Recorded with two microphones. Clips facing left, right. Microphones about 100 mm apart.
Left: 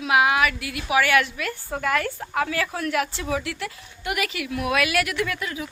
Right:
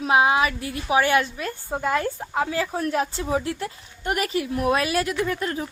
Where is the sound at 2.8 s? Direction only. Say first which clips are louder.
Right 1 dB; 35° right (ahead or behind).